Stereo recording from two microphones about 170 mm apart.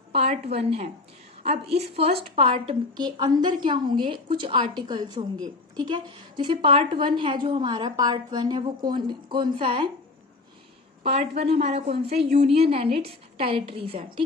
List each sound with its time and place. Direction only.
0.1 s a woman's voice: 35° right (ahead or behind)
11.0 s a woman's voice: 35° right (ahead or behind)